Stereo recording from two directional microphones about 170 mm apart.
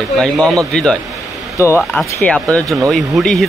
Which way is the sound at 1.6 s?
15° left (ahead or behind).